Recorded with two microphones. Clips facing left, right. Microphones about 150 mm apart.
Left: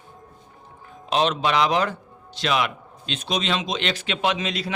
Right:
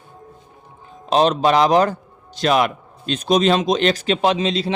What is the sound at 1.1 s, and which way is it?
A man's voice, 40° right (ahead or behind).